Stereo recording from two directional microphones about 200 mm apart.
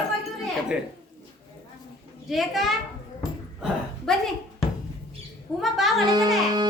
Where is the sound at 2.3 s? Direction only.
Centre (ahead or behind).